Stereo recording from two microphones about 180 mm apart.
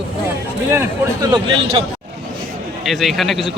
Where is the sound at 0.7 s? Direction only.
20° right (ahead or behind).